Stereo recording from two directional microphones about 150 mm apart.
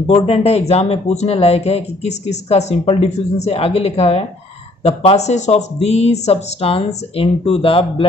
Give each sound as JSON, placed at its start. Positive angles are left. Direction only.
{"t": 0.0, "sound": "speech", "side_deg": 40}